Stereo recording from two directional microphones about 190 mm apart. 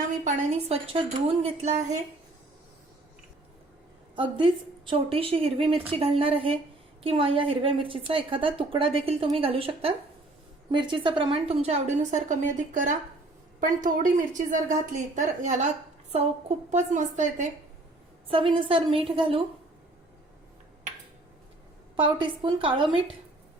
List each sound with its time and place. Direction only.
0.3 s a woman's voice: 35° right (ahead or behind)
4.1 s a woman's voice: 25° right (ahead or behind)
18.3 s a woman's voice: 25° right (ahead or behind)
21.9 s a woman's voice: 25° right (ahead or behind)